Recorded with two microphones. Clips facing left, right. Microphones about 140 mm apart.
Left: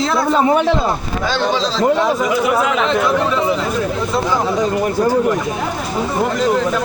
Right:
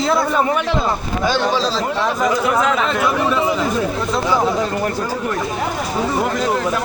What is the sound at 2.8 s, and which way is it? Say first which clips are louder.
Speech: left 2 dB; 5° right (ahead or behind).